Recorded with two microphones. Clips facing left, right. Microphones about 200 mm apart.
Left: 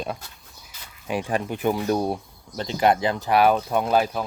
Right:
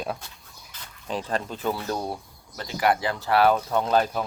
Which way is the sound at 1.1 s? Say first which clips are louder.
Left 3 dB; 10° left (ahead or behind).